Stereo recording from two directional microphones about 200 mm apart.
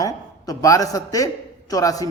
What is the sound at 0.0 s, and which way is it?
A man's voice, 15° left (ahead or behind).